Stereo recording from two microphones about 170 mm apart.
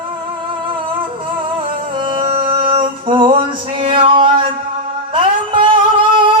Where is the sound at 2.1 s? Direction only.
30° right (ahead or behind).